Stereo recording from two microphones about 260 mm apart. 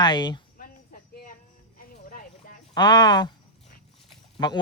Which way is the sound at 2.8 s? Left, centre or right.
Centre.